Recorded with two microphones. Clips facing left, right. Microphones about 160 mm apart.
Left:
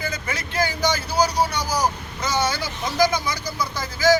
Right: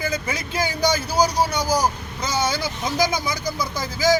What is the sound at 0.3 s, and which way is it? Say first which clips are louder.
A man's voice: even; 15° right (ahead or behind).